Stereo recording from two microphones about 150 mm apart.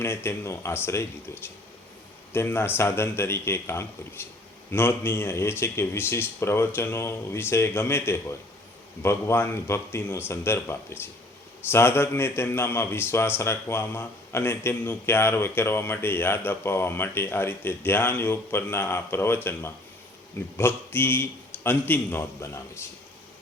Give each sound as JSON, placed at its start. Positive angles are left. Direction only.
{"t": 0.0, "sound": "a man's voice", "side_deg": 15}
{"t": 2.3, "sound": "a man's voice", "side_deg": 15}